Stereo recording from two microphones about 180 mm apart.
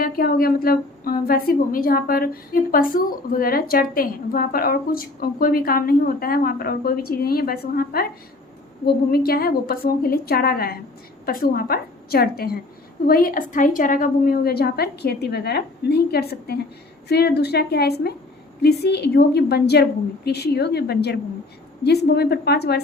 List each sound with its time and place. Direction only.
0.0 s a woman's voice: 55° left (ahead or behind)
9.1 s a woman's voice: 55° left (ahead or behind)